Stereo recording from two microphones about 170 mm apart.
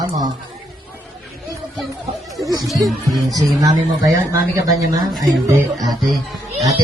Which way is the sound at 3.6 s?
20° right (ahead or behind).